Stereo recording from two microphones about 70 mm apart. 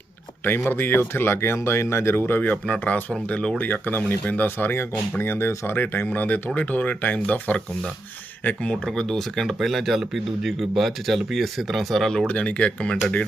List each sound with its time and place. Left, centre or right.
0.4 s speech: left; by 12.2 s centre
12.3 s speech: centre